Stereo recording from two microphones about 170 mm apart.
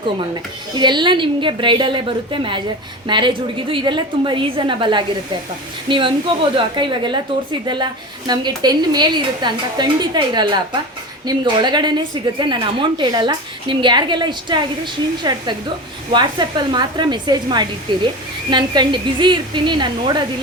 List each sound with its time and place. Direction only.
0.8 s a woman's voice: 25° right (ahead or behind)
8.3 s a woman's voice: 25° right (ahead or behind)